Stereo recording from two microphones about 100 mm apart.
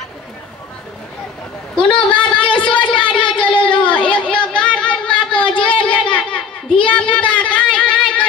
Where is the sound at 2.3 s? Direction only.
60° left (ahead or behind).